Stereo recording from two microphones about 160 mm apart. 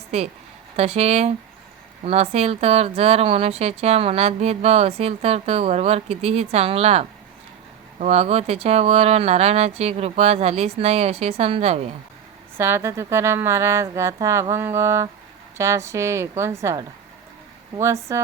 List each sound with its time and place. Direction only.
0.1 s speech: 40° right (ahead or behind)
12.5 s speech: 15° right (ahead or behind)